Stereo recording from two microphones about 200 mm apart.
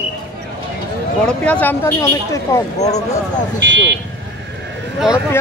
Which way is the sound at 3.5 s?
65° right (ahead or behind).